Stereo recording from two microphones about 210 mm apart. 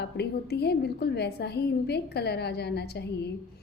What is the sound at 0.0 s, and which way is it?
A woman's voice, 50° left (ahead or behind).